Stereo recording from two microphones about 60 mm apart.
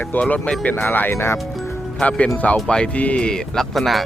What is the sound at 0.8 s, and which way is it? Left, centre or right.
Speech, left.